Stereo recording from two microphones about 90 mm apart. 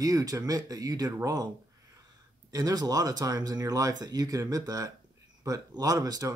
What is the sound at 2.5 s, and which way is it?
Speech, 45° right (ahead or behind).